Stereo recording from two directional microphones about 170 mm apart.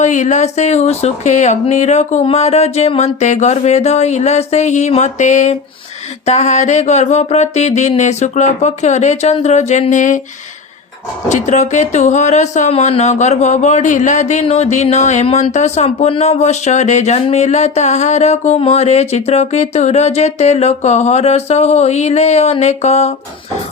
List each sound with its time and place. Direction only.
0.0 s speech: 45° left (ahead or behind)
11.3 s speech: 45° left (ahead or behind)